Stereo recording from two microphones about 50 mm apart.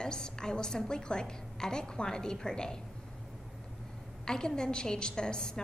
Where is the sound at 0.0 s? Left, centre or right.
Centre.